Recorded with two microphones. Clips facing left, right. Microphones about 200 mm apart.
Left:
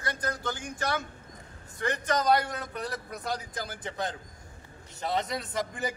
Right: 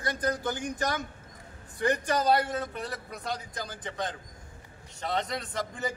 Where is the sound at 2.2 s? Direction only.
25° right (ahead or behind).